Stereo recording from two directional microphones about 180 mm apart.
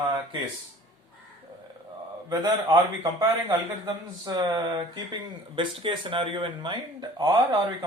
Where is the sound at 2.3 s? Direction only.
20° right (ahead or behind).